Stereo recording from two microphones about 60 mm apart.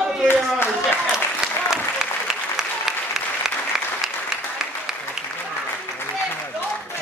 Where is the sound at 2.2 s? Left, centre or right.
Centre.